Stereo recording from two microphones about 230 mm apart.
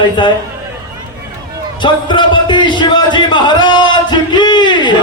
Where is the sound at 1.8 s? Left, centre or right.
Centre.